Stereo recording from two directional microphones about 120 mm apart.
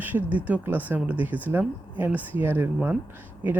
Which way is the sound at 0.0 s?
15° right (ahead or behind).